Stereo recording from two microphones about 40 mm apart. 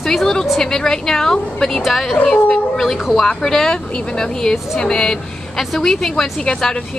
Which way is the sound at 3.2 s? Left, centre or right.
Centre.